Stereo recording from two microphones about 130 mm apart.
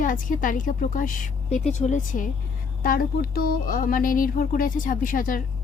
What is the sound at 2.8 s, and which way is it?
A woman's voice, 90° left.